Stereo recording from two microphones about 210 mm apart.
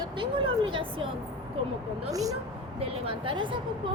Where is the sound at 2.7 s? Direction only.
25° right (ahead or behind).